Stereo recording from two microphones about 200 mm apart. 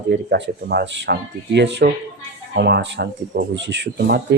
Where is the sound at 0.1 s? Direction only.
60° right (ahead or behind).